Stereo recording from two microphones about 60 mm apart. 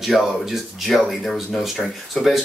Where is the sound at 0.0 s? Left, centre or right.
Centre.